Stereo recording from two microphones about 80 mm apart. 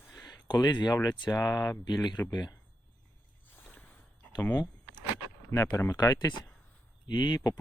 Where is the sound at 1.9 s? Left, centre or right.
Left.